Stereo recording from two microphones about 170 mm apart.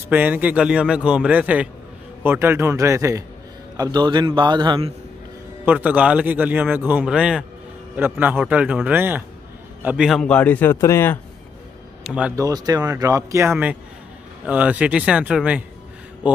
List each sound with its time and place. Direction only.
0.1 s speech: 10° right (ahead or behind); by 4.9 s 30° right (ahead or behind)
5.7 s a man's voice: 10° right (ahead or behind); by 11.1 s 15° left (ahead or behind)
12.0 s speech: 5° right (ahead or behind)
12.4 s speech: 20° right (ahead or behind)